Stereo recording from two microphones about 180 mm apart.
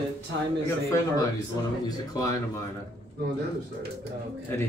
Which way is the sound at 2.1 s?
20° left (ahead or behind).